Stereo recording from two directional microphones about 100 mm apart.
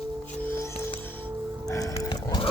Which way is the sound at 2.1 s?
40° left (ahead or behind).